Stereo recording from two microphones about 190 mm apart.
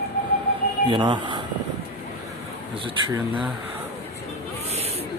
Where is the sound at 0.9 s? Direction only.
25° right (ahead or behind).